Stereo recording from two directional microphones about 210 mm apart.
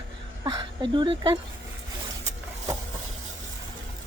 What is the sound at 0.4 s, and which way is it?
Speech, 20° right (ahead or behind).